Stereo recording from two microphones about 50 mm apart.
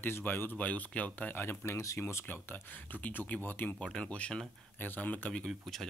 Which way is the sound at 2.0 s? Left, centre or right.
Left.